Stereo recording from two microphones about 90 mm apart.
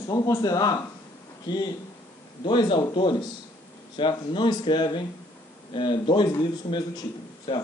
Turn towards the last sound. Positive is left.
turn(degrees=60)  # may be behind; listen again after turning